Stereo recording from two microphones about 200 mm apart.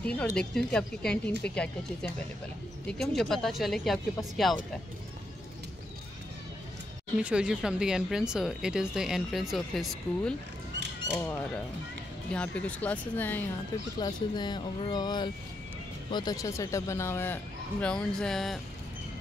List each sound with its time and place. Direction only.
0.0 s speech: 5° left (ahead or behind)
7.2 s speech: 5° right (ahead or behind)
11.1 s speech: 10° left (ahead or behind)
13.9 s speech: 20° left (ahead or behind); by 18.6 s centre (ahead or behind)